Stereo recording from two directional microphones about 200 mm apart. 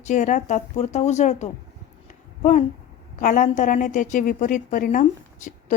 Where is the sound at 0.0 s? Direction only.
35° left (ahead or behind).